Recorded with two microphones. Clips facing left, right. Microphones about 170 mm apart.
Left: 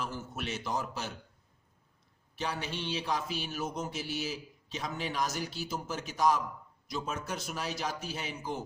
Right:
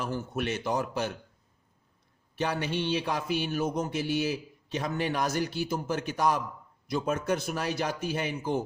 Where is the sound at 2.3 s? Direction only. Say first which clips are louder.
Right 6 dB; 60° right (ahead or behind).